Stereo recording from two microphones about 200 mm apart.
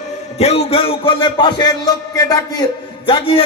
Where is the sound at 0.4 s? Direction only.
30° left (ahead or behind).